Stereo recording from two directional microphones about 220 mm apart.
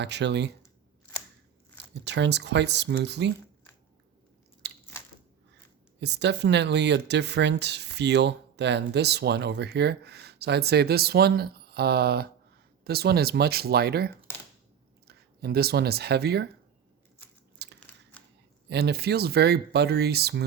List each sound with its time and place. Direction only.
0.0 s speech: 50° right (ahead or behind)
2.0 s speech: 50° right (ahead or behind)
4.6 s biting: 50° right (ahead or behind)
6.0 s speech: 50° right (ahead or behind)
17.6 s biting: 50° right (ahead or behind)
18.7 s speech: 45° right (ahead or behind)